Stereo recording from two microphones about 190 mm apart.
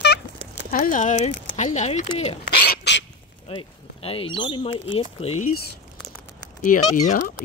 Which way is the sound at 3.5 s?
30° left (ahead or behind).